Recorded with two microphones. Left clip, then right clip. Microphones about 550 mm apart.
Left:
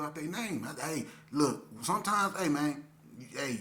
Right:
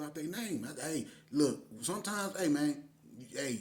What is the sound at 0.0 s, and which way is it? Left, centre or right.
A man's voice, right.